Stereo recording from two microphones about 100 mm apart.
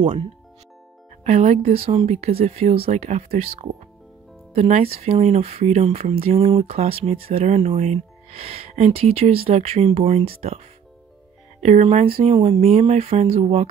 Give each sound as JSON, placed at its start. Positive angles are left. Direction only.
{"t": 1.3, "sound": "speech", "side_deg": -90}
{"t": 11.8, "sound": "speech", "side_deg": -90}